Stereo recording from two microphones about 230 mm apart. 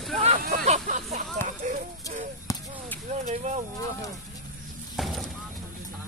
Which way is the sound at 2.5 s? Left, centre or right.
Centre.